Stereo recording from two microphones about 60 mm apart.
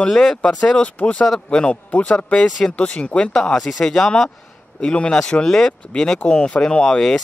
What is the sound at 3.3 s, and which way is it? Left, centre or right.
Speech, centre.